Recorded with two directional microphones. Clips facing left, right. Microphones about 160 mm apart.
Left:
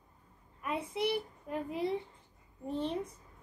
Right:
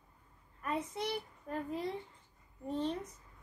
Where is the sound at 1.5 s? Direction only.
15° left (ahead or behind).